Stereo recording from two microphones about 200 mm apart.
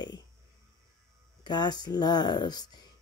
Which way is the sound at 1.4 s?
20° left (ahead or behind).